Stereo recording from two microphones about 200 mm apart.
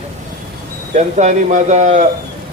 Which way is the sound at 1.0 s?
35° right (ahead or behind).